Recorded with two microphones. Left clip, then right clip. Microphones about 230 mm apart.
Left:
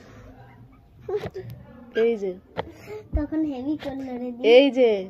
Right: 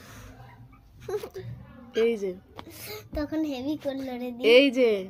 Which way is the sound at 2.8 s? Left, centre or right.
Right.